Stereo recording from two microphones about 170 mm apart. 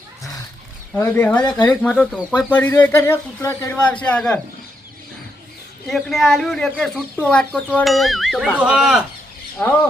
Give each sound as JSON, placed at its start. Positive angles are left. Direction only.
{"t": 0.9, "sound": "speech", "side_deg": 10}
{"t": 5.9, "sound": "speech", "side_deg": 0}